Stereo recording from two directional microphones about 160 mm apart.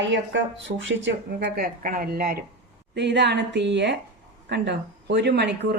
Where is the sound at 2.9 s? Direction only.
90° right.